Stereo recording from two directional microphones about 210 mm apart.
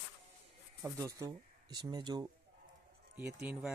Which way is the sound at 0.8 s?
15° right (ahead or behind).